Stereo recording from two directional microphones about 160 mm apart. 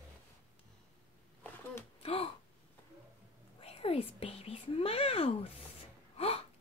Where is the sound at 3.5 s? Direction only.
40° left (ahead or behind).